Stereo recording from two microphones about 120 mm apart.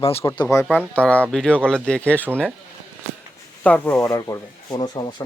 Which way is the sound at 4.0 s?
25° left (ahead or behind).